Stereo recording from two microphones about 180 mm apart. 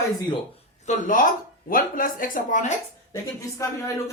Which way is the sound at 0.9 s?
50° left (ahead or behind).